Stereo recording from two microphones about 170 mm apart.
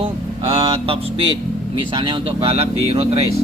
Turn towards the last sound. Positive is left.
turn(degrees=-35)  # may be behind; listen again after turning